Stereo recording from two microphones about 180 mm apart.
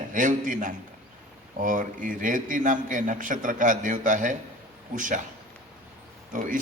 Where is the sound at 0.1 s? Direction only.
45° right (ahead or behind).